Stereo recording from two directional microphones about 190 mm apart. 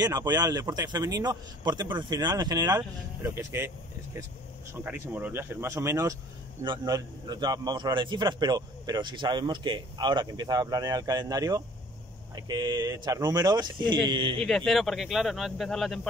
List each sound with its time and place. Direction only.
0.0 s a man's voice: 20° right (ahead or behind)
4.8 s a man's voice: 10° right (ahead or behind); by 14.4 s 25° right (ahead or behind)
14.4 s speech: centre (ahead or behind)